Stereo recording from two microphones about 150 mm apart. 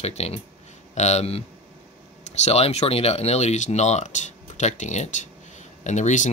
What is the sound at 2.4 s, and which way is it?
Speech, 45° left (ahead or behind).